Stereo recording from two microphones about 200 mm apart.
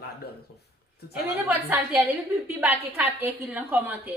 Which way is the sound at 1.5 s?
10° right (ahead or behind).